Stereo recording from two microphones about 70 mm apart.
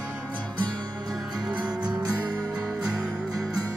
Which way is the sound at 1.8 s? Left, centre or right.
Right.